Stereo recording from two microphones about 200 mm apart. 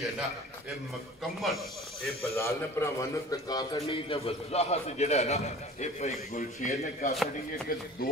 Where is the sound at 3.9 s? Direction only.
30° left (ahead or behind).